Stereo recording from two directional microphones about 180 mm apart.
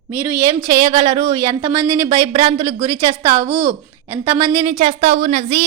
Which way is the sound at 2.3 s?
25° right (ahead or behind).